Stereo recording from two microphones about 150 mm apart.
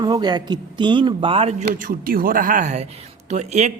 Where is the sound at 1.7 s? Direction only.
65° right (ahead or behind).